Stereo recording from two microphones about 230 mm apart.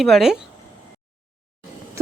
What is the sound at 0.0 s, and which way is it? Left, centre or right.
Speech, centre.